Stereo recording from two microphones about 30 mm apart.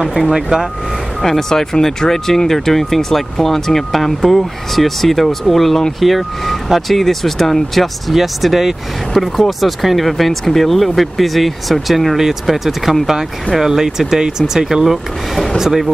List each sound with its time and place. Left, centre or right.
0.0 s speech: centre
1.2 s speech: centre
8.1 s speech: centre
12.2 s speech: centre
14.9 s speech: centre
15.5 s speech: centre